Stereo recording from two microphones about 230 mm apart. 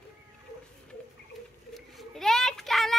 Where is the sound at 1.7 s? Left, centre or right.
Centre.